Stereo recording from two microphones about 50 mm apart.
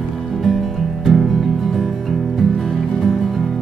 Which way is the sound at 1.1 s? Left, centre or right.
Centre.